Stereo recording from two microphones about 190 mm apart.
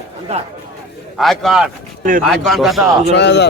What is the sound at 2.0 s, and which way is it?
Speech, 45° right (ahead or behind).